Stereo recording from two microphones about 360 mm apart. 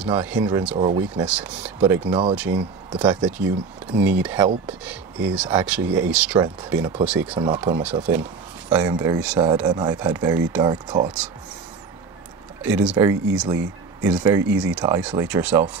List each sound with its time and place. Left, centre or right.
0.0 s speech: centre
0.7 s speech: centre
1.0 s speech: centre
12.6 s speech: centre